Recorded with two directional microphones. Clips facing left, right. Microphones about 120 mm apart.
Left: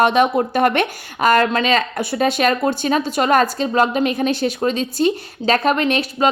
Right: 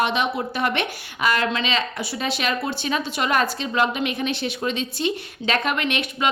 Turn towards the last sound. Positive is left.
turn(degrees=35)  # may be behind; listen again after turning